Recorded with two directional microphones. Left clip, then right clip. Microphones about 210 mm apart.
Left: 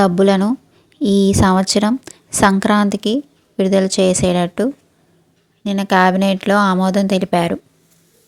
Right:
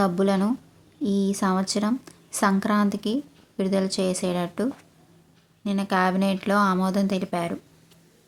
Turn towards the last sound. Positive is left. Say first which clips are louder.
# left 11 dB
turn(degrees=30)  # may be behind; listen again after turning